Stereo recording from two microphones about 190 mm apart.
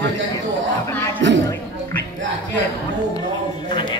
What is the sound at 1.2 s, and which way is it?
Speech, 75° right (ahead or behind).